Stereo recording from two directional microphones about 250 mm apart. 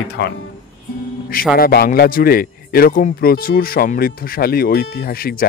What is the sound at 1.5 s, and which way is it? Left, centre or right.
Speech, left.